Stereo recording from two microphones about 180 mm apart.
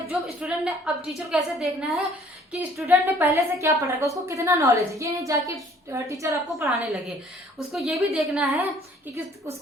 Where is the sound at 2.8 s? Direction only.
15° right (ahead or behind).